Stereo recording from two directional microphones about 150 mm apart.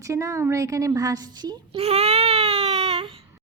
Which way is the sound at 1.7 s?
45° right (ahead or behind).